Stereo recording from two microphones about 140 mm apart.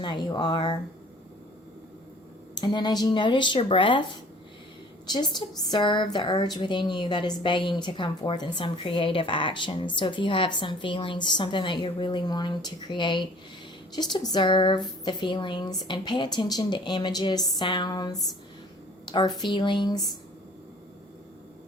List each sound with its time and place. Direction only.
0.0 s a woman's voice: 35° left (ahead or behind)
2.6 s a woman's voice: 30° left (ahead or behind)
5.0 s a woman's voice: 30° left (ahead or behind)